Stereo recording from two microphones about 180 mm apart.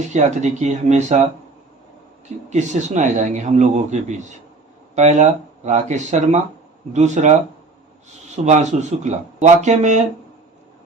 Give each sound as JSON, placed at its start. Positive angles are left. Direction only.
{"t": 0.1, "sound": "a man's voice", "side_deg": -40}
{"t": 2.5, "sound": "a man's voice", "side_deg": -40}
{"t": 8.4, "sound": "a man's voice", "side_deg": -40}